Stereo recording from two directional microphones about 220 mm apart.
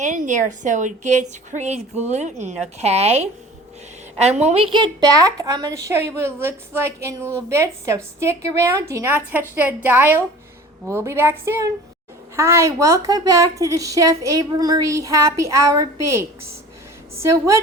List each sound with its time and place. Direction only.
0.0 s a woman's voice: 35° right (ahead or behind); by 16.2 s 15° right (ahead or behind)
17.3 s a woman's voice: 15° right (ahead or behind)